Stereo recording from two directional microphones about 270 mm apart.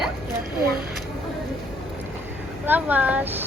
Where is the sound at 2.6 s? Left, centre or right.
Centre.